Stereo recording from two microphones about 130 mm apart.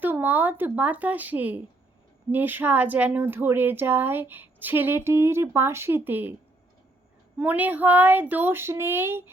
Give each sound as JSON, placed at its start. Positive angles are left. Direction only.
{"t": 0.0, "sound": "speech", "side_deg": -15}
{"t": 7.3, "sound": "speech", "side_deg": -15}